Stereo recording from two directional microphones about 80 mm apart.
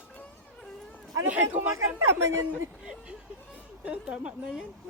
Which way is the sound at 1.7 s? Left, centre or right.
Right.